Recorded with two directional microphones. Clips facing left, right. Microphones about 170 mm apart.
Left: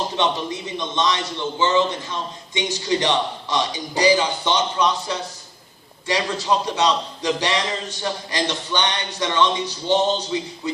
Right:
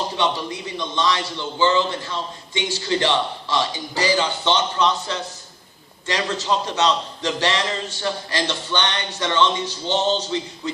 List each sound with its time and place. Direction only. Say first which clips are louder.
0.2 s a man's voice: left 1 dB; 20° left (ahead or behind)